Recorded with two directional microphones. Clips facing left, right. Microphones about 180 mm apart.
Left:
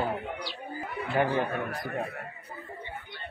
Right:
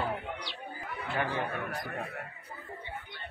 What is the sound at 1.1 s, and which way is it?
Speech, 25° left (ahead or behind).